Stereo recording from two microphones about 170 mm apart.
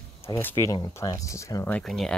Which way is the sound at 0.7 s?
20° left (ahead or behind).